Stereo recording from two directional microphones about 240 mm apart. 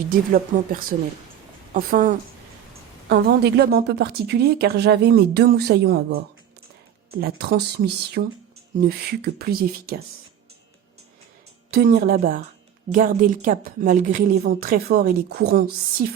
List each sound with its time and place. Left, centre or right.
0.1 s speech: right
11.7 s speech: right